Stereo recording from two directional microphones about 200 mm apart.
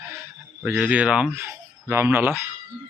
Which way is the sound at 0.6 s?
5° right (ahead or behind).